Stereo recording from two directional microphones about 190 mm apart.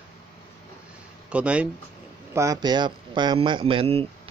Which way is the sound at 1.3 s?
5° right (ahead or behind).